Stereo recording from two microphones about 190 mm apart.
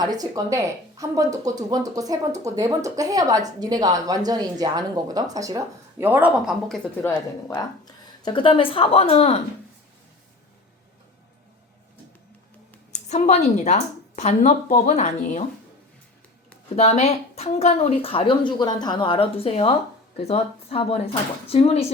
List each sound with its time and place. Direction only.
0.0 s speech: 20° right (ahead or behind); by 6.7 s centre (ahead or behind)
7.0 s speech: 15° left (ahead or behind); by 9.4 s 35° left (ahead or behind)
12.9 s a woman's voice: 35° left (ahead or behind)
16.7 s a woman's voice: 35° left (ahead or behind)